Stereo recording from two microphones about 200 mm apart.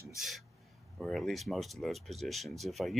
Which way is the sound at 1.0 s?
Centre (ahead or behind).